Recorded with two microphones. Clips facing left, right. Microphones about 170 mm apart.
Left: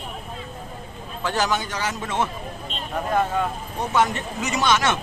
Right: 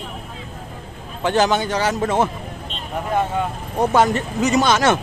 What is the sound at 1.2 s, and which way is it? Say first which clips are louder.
A man's voice: right 6 dB; 25° right (ahead or behind).